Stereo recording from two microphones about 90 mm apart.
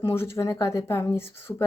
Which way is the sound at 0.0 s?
30° left (ahead or behind).